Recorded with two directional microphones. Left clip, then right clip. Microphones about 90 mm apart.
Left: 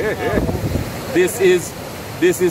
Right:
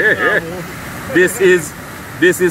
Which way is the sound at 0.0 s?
15° right (ahead or behind).